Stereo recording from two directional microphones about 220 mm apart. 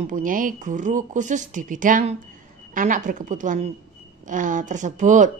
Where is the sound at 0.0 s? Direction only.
35° right (ahead or behind).